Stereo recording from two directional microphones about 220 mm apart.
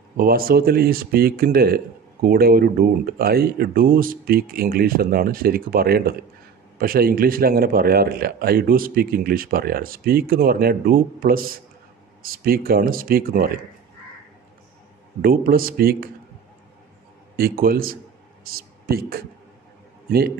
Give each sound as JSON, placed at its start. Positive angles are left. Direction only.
{"t": 0.2, "sound": "a man's voice", "side_deg": -40}
{"t": 15.2, "sound": "a man's voice", "side_deg": -40}
{"t": 17.4, "sound": "a man's voice", "side_deg": -40}